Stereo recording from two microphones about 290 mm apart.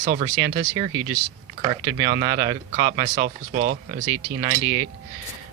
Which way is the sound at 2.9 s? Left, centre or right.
Right.